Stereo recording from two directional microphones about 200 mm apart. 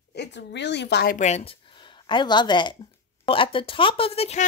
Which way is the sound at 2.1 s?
20° left (ahead or behind).